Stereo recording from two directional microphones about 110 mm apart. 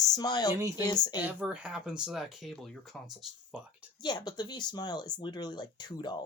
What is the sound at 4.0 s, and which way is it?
Speech, 40° left (ahead or behind).